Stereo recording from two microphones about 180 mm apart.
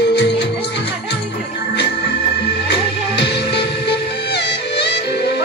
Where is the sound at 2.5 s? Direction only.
70° left (ahead or behind).